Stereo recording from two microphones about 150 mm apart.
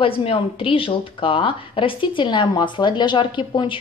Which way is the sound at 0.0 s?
35° left (ahead or behind).